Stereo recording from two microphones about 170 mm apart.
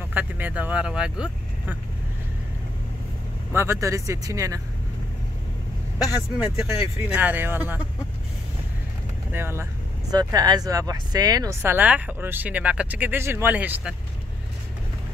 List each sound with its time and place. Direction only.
0.1 s speech: 10° right (ahead or behind)
3.5 s speech: 15° right (ahead or behind)
6.3 s speech: 5° right (ahead or behind)
9.3 s speech: 15° right (ahead or behind)
10.1 s speech: 25° right (ahead or behind); by 13.9 s 10° right (ahead or behind)